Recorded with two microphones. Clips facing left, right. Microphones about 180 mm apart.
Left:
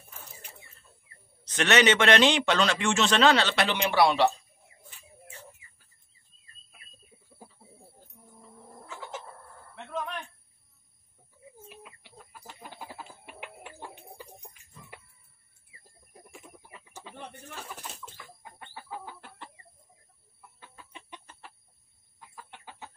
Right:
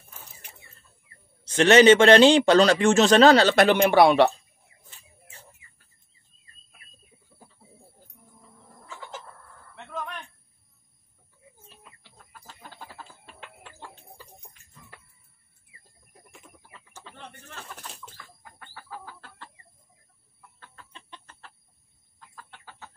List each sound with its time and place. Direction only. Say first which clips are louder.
1.5 s a man's voice: right 8 dB; 30° right (ahead or behind); by 4.3 s 55° right (ahead or behind)
8.8 s chicken: even; centre (ahead or behind)
9.8 s a sound: left 1 dB; centre (ahead or behind)
11.7 s chicken: left 5 dB; 10° left (ahead or behind)
16.3 s a sound: left 3 dB; 10° left (ahead or behind)
16.6 s bird: left 2 dB; 15° left (ahead or behind)
18.1 s chicken: left 1 dB; 20° left (ahead or behind)